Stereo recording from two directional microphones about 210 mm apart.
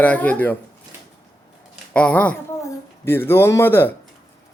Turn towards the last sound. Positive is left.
turn(degrees=10)  # may be behind; listen again after turning